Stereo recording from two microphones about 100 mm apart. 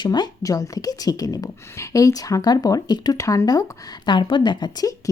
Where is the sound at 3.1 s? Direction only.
30° left (ahead or behind).